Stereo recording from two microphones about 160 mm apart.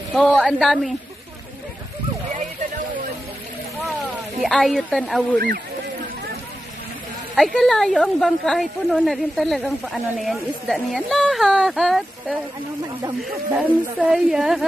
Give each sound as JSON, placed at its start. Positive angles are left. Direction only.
{"t": 0.1, "sound": "speech", "side_deg": 0}
{"t": 4.4, "sound": "speech", "side_deg": 0}
{"t": 7.3, "sound": "speech", "side_deg": 0}